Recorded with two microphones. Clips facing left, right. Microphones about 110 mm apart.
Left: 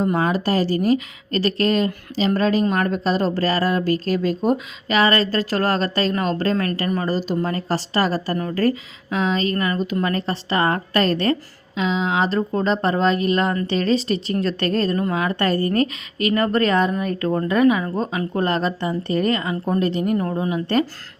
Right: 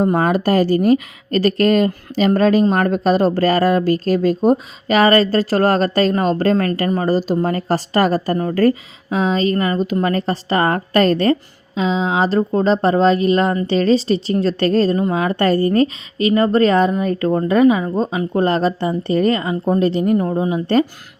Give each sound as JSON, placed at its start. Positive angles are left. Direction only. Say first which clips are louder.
{"t": 0.0, "sound": "a woman's voice", "louder": "right 4 dB", "side_deg": -45}
{"t": 14.9, "sound": "a woman's voice", "louder": "right 4 dB", "side_deg": -25}